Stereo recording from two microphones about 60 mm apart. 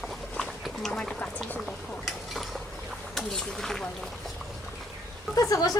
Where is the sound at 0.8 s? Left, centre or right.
Centre.